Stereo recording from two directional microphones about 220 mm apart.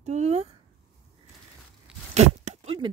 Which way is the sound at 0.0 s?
30° right (ahead or behind).